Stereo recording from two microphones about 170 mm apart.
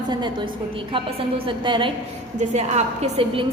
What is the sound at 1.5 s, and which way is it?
Speech, 30° right (ahead or behind).